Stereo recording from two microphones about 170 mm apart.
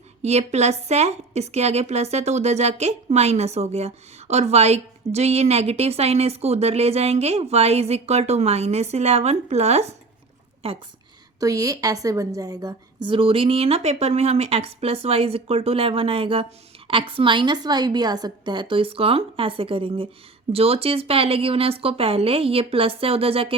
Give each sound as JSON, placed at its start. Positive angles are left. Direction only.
{"t": 0.2, "sound": "a woman's voice", "side_deg": -40}
{"t": 11.3, "sound": "a woman's voice", "side_deg": -20}